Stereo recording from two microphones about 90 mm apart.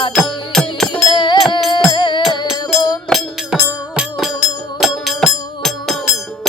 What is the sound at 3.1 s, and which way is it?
Music, centre (ahead or behind).